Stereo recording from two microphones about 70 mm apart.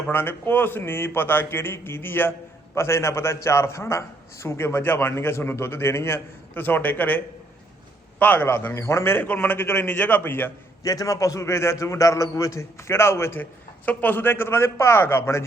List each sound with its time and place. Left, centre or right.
0.1 s a man's voice: left
8.2 s a man's voice: left
8.7 s a man's voice: left
10.8 s a man's voice: left